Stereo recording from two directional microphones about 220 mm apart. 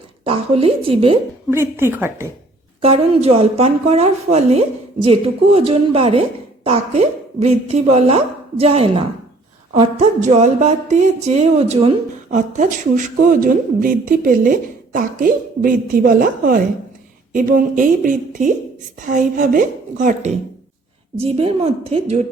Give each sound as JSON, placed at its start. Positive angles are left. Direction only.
{"t": 0.3, "sound": "a woman's voice", "side_deg": -25}
{"t": 1.5, "sound": "a woman's voice", "side_deg": -10}
{"t": 2.8, "sound": "a woman's voice", "side_deg": -25}